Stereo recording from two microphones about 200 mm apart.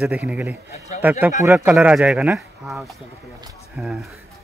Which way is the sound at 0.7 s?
35° left (ahead or behind).